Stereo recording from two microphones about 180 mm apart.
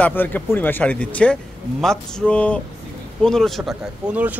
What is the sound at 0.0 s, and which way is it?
A man's voice, 10° left (ahead or behind).